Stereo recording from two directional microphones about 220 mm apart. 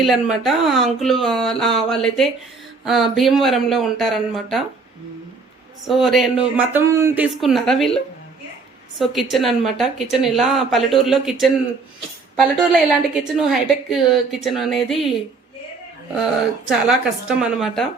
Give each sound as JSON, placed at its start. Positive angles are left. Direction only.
{"t": 0.0, "sound": "a woman's voice", "side_deg": 0}
{"t": 5.9, "sound": "a woman's voice", "side_deg": 0}
{"t": 9.0, "sound": "a woman's voice", "side_deg": 0}
{"t": 13.3, "sound": "a woman's voice", "side_deg": 0}
{"t": 16.1, "sound": "a woman's voice", "side_deg": 0}